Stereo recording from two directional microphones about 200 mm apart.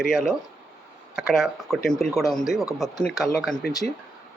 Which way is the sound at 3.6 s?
50° left (ahead or behind).